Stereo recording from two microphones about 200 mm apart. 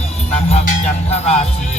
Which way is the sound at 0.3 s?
30° left (ahead or behind).